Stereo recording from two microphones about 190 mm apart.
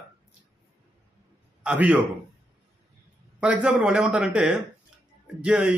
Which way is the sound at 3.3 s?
5° right (ahead or behind).